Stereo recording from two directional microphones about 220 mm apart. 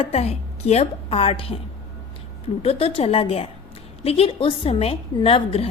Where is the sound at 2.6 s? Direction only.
25° left (ahead or behind).